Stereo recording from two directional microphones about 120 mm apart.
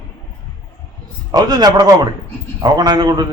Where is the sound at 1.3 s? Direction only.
35° right (ahead or behind).